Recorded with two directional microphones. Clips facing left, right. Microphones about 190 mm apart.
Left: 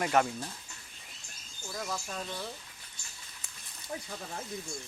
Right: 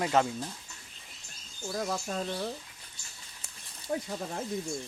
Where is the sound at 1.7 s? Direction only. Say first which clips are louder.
Right 5 dB; 35° right (ahead or behind).